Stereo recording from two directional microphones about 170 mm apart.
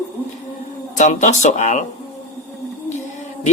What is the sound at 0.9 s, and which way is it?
Speech, 45° left (ahead or behind).